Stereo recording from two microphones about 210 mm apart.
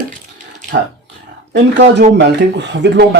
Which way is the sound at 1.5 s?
55° right (ahead or behind).